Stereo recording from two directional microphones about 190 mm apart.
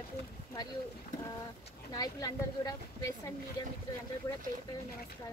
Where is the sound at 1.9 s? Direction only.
20° left (ahead or behind).